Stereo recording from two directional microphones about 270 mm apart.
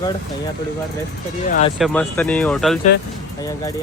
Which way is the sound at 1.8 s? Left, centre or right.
Centre.